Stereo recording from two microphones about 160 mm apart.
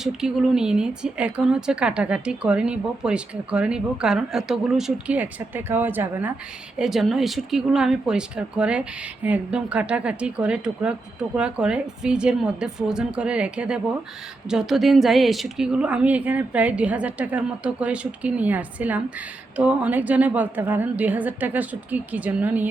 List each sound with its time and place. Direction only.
0.0 s a woman's voice: 5° right (ahead or behind)